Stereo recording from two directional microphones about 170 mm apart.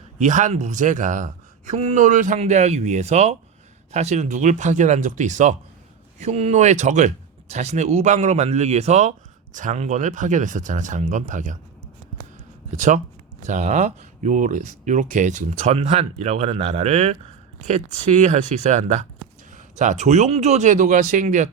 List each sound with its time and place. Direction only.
0.2 s speech: 50° right (ahead or behind)
12.7 s speech: 45° right (ahead or behind)